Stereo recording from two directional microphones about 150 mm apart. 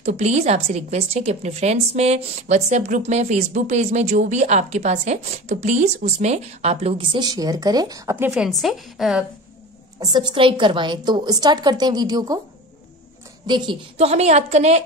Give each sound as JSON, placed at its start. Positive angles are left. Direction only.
{"t": 0.0, "sound": "a woman's voice", "side_deg": -50}
{"t": 8.3, "sound": "a woman's voice", "side_deg": 0}
{"t": 9.9, "sound": "a woman's voice", "side_deg": -30}
{"t": 13.5, "sound": "a woman's voice", "side_deg": -30}
{"t": 13.9, "sound": "a woman's voice", "side_deg": -45}